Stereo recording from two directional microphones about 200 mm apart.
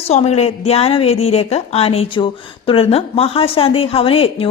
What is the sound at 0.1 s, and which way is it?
A woman's voice, 35° left (ahead or behind).